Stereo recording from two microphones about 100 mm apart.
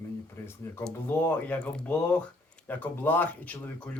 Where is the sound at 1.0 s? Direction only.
15° left (ahead or behind).